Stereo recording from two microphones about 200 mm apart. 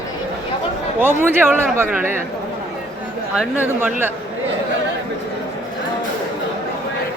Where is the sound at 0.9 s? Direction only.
10° right (ahead or behind).